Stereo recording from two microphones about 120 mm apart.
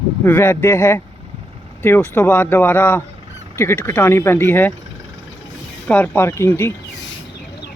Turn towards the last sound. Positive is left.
turn(degrees=20)  # may be behind; listen again after turning